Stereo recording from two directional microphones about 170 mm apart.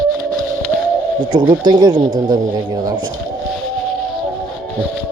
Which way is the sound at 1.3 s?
25° right (ahead or behind).